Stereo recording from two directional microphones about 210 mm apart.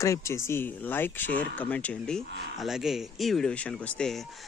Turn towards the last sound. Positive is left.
turn(degrees=5)  # may be behind; listen again after turning